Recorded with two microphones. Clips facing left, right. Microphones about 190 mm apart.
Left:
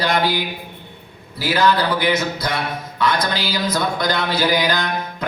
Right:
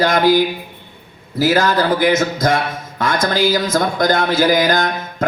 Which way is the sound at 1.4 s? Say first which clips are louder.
Right 3 dB; 45° right (ahead or behind).